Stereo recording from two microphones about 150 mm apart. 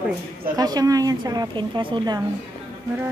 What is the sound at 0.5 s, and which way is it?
A woman's voice, 25° right (ahead or behind).